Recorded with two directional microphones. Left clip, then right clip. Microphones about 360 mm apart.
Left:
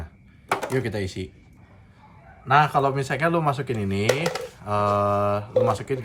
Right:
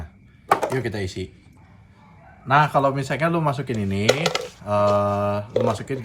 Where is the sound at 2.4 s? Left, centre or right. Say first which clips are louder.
Right 1 dB; centre.